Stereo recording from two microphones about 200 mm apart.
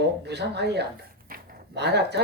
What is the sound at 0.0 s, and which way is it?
Speech, 55° right (ahead or behind).